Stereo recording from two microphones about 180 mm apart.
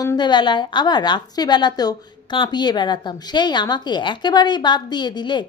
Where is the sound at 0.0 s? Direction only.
20° left (ahead or behind).